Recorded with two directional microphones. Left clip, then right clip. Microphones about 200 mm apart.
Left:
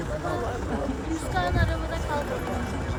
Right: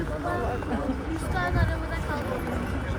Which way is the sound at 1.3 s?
50° left (ahead or behind).